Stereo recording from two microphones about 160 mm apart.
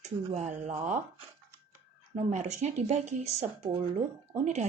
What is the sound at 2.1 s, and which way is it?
Speech, 45° right (ahead or behind).